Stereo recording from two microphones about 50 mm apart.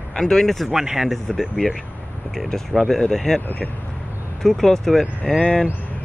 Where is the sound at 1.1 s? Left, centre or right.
Centre.